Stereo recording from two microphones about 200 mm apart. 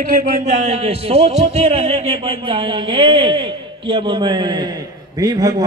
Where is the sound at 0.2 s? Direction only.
35° right (ahead or behind).